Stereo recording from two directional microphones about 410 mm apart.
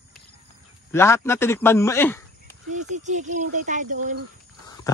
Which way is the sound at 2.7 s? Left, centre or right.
Centre.